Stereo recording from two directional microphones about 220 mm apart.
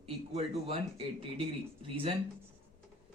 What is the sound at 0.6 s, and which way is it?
Speech, 25° right (ahead or behind).